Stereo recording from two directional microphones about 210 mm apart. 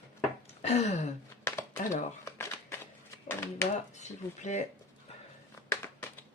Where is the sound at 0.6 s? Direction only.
30° left (ahead or behind).